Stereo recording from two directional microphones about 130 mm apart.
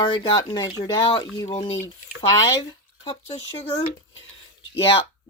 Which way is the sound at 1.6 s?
50° left (ahead or behind).